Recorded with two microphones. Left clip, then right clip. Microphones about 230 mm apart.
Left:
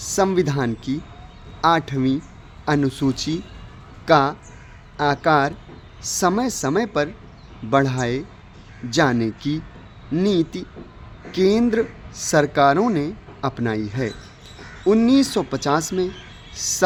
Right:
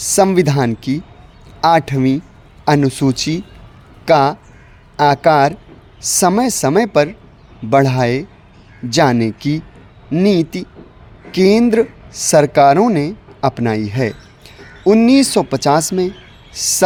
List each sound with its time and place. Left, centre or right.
0.0 s speech: right